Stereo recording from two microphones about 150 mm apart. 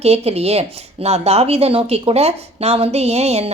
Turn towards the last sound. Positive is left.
turn(degrees=-45)  # may be behind; listen again after turning